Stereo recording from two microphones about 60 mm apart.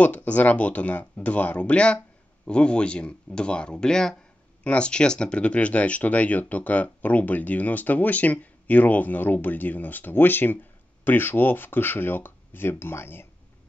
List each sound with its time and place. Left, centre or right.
0.0 s speech: left